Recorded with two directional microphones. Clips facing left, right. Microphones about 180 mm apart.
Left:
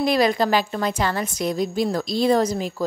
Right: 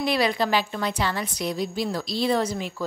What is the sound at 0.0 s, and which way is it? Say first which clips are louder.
A woman's voice: left 4 dB; 45° left (ahead or behind).